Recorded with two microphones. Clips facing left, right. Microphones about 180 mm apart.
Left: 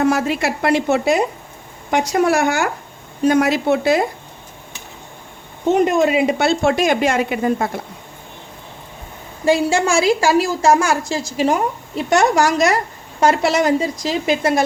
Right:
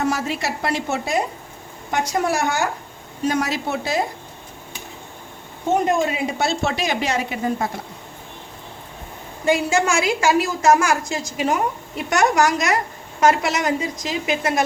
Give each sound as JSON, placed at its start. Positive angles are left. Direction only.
{"t": 0.0, "sound": "speech", "side_deg": 55}
{"t": 5.7, "sound": "speech", "side_deg": 75}
{"t": 9.5, "sound": "a woman's voice", "side_deg": 30}